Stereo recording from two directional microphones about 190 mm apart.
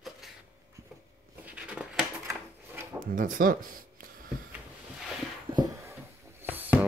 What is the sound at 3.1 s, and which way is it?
Speech, 45° right (ahead or behind).